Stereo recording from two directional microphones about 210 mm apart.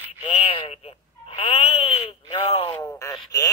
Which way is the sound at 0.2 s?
25° left (ahead or behind).